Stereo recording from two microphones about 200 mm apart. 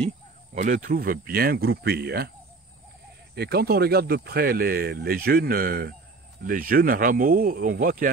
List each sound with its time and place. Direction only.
0.6 s speech: 40° right (ahead or behind)
3.3 s speech: 55° right (ahead or behind)